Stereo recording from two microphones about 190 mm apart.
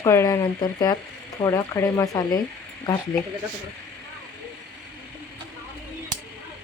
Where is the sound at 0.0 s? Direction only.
15° left (ahead or behind).